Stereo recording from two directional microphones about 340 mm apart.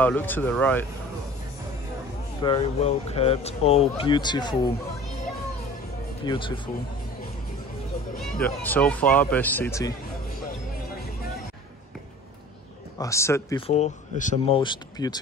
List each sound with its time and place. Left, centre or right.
0.0 s speech: centre
2.4 s speech: centre
6.2 s speech: centre
8.6 s speech: centre
13.0 s speech: centre